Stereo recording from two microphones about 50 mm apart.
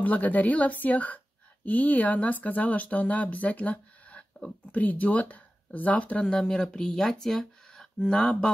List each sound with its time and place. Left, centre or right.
0.0 s a woman's voice: left; by 8.5 s centre